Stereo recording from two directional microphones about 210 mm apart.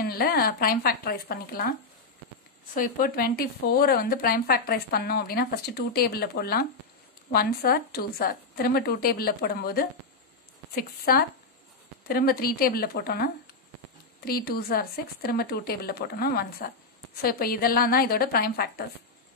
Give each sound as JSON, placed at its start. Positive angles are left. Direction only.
{"t": 0.0, "sound": "speech", "side_deg": 45}
{"t": 2.7, "sound": "speech", "side_deg": 40}
{"t": 14.2, "sound": "speech", "side_deg": 45}